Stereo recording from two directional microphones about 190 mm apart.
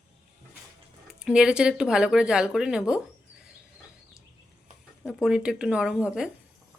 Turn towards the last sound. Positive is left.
turn(degrees=-5)  # may be behind; listen again after turning